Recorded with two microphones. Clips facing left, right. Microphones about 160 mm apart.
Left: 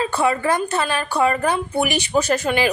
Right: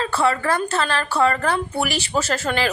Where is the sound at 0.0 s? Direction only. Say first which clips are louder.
Left 1 dB; 15° left (ahead or behind).